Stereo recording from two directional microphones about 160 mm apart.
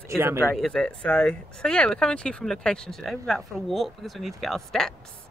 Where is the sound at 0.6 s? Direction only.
5° left (ahead or behind).